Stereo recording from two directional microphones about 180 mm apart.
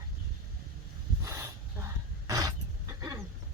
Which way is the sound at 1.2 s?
15° right (ahead or behind).